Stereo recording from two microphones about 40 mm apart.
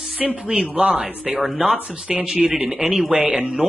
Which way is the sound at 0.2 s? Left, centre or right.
Centre.